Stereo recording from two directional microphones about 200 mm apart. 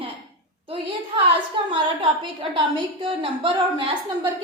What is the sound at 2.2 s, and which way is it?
A woman's voice, 25° right (ahead or behind).